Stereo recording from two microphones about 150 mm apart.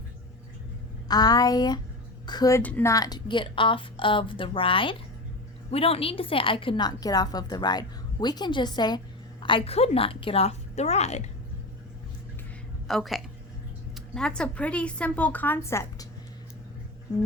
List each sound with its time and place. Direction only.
1.0 s a woman's voice: 25° left (ahead or behind)
2.6 s a woman's voice: 10° left (ahead or behind)
2.9 s a woman's voice: 25° left (ahead or behind); by 11.2 s 45° left (ahead or behind)
12.9 s a woman's voice: centre (ahead or behind); by 16.0 s 20° left (ahead or behind)